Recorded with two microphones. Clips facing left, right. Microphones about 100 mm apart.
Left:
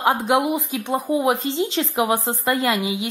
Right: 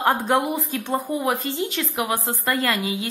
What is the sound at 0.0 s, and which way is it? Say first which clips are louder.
A woman's voice: left 1 dB; 10° left (ahead or behind).